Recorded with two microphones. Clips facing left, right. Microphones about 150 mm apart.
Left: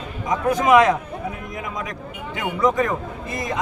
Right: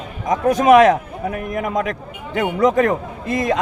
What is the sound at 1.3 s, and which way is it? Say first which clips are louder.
Speech: right 9 dB; 60° right (ahead or behind).